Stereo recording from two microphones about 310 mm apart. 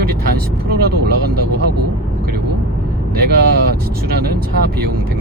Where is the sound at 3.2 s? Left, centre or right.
Right.